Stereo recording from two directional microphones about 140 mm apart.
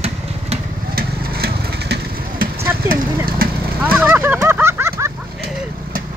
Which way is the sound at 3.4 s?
90° right.